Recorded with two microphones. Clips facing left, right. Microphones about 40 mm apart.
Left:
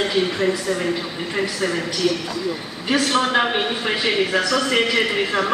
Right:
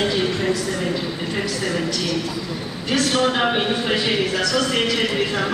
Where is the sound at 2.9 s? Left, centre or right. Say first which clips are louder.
Left 1 dB; centre.